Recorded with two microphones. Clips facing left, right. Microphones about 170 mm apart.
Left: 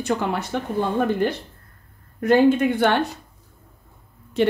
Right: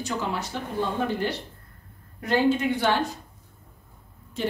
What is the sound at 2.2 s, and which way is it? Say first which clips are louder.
Speech: left 6 dB; 50° left (ahead or behind).